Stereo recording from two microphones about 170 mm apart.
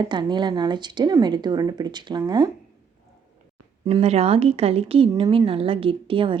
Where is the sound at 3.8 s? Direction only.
35° right (ahead or behind).